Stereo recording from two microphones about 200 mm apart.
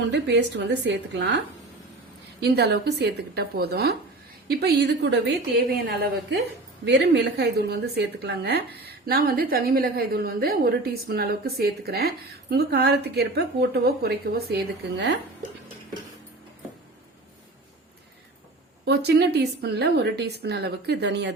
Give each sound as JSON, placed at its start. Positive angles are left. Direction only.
{"t": 0.1, "sound": "a woman's voice", "side_deg": -60}
{"t": 2.4, "sound": "a woman's voice", "side_deg": -55}
{"t": 6.8, "sound": "a woman's voice", "side_deg": -60}
{"t": 18.9, "sound": "a woman's voice", "side_deg": -55}